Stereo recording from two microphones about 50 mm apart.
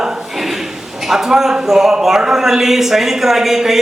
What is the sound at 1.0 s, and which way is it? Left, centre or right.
A man's voice, centre.